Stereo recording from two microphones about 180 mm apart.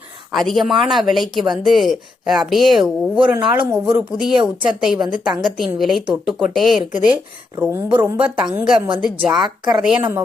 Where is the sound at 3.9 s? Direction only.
5° right (ahead or behind).